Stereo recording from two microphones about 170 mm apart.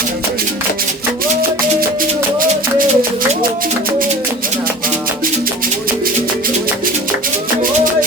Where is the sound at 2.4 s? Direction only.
55° right (ahead or behind).